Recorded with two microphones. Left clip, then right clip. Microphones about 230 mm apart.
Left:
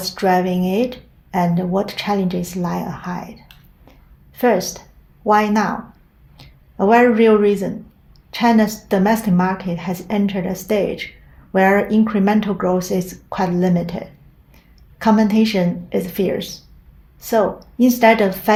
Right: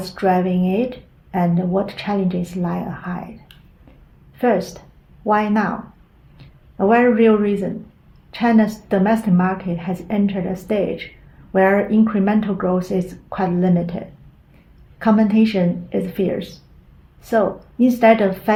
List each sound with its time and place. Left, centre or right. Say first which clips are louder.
0.0 s speech: left 1 dB; left
4.4 s speech: left 2 dB; left